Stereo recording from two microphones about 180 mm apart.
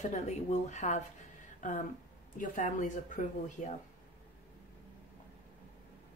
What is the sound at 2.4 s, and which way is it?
Speech, 45° left (ahead or behind).